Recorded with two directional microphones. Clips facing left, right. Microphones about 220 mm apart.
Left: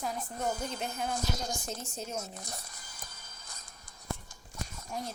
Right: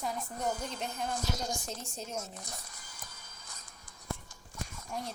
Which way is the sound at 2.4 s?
40° left (ahead or behind).